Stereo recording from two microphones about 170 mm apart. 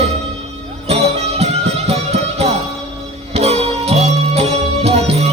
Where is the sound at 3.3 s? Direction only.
40° right (ahead or behind).